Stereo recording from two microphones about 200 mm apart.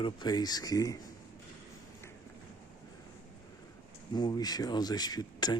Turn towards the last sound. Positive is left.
turn(degrees=20)  # may be behind; listen again after turning